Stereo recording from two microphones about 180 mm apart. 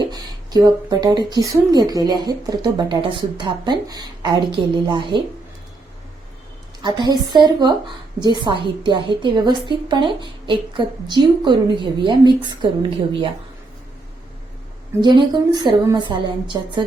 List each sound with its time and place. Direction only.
0.0 s speech: 20° right (ahead or behind)
6.8 s speech: 25° right (ahead or behind)
15.0 s speech: 25° right (ahead or behind)